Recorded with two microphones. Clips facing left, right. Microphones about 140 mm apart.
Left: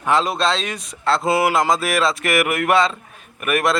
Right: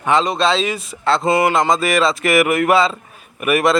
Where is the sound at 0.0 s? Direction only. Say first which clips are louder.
Right 2 dB; centre (ahead or behind).